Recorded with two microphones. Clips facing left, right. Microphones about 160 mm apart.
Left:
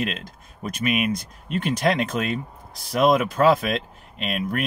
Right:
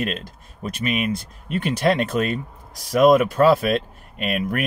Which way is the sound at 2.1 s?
50° right (ahead or behind).